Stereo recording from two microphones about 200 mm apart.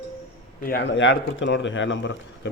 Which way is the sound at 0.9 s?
65° left (ahead or behind).